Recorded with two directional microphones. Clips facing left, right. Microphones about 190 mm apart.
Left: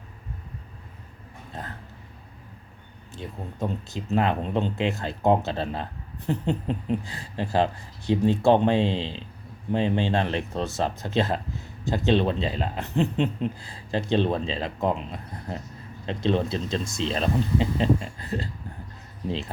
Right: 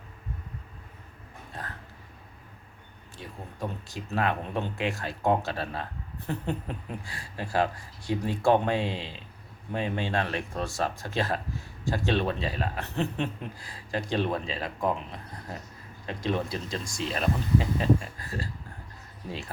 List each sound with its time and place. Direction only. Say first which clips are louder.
1.6 s speech: left 3 dB; 20° left (ahead or behind)
3.2 s speech: left 5 dB; 25° left (ahead or behind)